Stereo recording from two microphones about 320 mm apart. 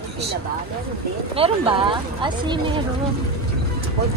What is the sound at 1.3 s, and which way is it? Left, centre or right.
A woman's voice, centre.